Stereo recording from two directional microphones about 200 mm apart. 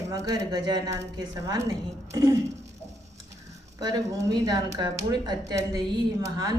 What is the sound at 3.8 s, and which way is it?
A woman's voice, 20° right (ahead or behind).